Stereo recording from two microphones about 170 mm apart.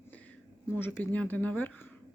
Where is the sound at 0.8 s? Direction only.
10° left (ahead or behind).